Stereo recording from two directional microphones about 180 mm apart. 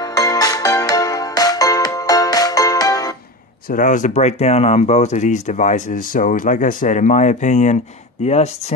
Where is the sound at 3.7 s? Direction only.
45° left (ahead or behind).